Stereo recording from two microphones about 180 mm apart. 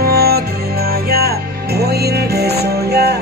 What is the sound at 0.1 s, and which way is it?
Music, 60° right (ahead or behind).